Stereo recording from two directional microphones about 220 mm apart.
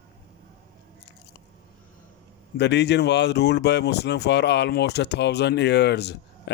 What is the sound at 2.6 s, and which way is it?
Speech, 50° left (ahead or behind).